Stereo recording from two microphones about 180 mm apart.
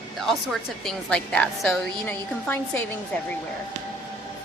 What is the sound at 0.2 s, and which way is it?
A woman's voice, centre (ahead or behind).